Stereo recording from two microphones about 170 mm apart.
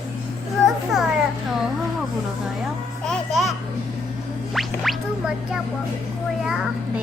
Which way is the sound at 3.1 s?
Centre (ahead or behind).